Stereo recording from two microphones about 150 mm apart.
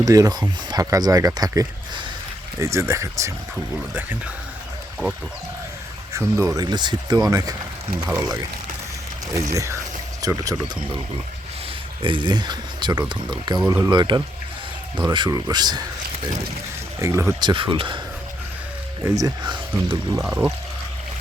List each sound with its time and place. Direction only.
0.0 s speech: 25° right (ahead or behind)
6.1 s speech: 20° right (ahead or behind)
12.0 s speech: 30° right (ahead or behind)
17.0 s speech: 20° right (ahead or behind)
17.4 s speech: 30° right (ahead or behind)
19.0 s speech: 20° right (ahead or behind)
20.2 s speech: 10° right (ahead or behind)